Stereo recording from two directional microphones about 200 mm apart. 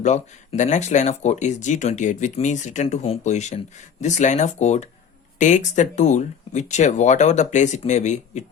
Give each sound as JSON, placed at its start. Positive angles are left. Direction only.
{"t": 0.0, "sound": "speech", "side_deg": 35}